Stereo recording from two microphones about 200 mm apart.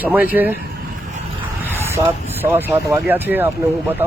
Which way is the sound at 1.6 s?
10° right (ahead or behind).